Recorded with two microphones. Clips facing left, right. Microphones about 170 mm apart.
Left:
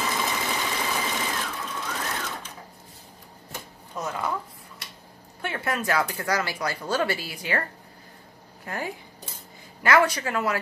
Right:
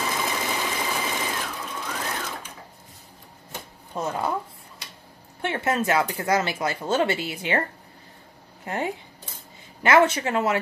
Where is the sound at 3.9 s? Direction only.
30° right (ahead or behind).